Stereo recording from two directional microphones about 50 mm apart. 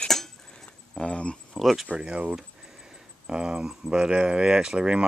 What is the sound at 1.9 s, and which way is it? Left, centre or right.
Speech, centre.